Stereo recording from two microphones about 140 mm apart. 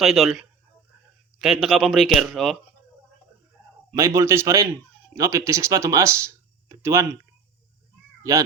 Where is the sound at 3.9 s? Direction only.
20° right (ahead or behind).